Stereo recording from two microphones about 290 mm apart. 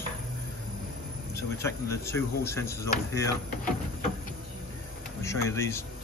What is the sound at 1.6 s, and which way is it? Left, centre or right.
Speech, centre.